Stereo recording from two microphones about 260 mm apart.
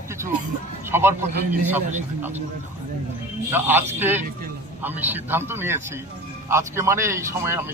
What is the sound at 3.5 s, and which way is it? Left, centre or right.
Speech, centre.